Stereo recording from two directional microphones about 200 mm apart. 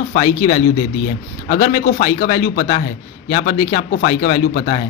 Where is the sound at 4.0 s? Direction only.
45° left (ahead or behind).